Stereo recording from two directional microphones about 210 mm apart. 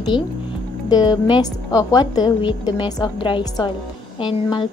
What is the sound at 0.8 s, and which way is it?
A woman's voice, 20° left (ahead or behind).